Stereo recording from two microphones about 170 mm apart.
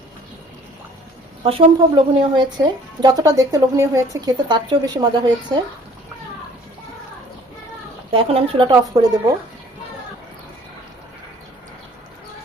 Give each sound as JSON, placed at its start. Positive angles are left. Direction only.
{"t": 1.5, "sound": "a woman's voice", "side_deg": -35}
{"t": 8.1, "sound": "speech", "side_deg": -35}
{"t": 8.7, "sound": "a woman's voice", "side_deg": -20}